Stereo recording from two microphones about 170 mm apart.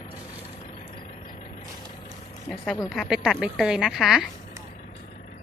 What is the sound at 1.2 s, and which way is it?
Vehicle, 50° left (ahead or behind).